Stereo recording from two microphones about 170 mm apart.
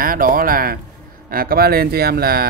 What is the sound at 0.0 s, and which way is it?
Speech, 55° right (ahead or behind).